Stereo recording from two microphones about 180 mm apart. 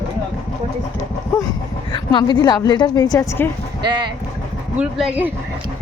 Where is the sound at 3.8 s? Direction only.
25° right (ahead or behind).